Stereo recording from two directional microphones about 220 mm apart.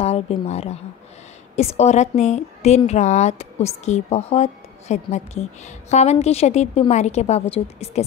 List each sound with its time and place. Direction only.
0.0 s a woman's voice: 30° left (ahead or behind)